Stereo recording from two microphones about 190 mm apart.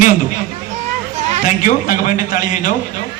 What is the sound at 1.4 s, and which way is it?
A man's voice, 45° left (ahead or behind).